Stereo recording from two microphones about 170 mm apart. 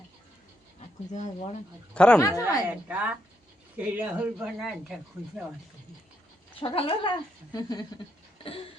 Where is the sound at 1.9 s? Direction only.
5° left (ahead or behind).